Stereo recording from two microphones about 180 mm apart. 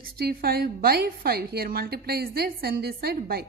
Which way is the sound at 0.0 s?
60° right (ahead or behind).